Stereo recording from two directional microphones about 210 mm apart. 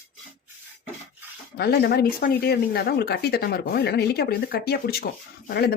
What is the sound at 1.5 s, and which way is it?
Speech, 50° left (ahead or behind).